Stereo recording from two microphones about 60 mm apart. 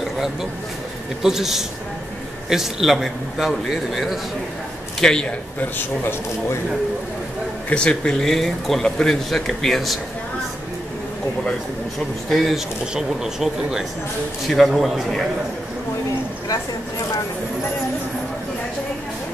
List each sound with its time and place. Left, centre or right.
0.0 s a sound: centre
1.2 s speech: centre
5.0 s a man's voice: centre
5.6 s a man's voice: left
7.7 s speech: centre
12.3 s speech: centre
12.9 s speech: centre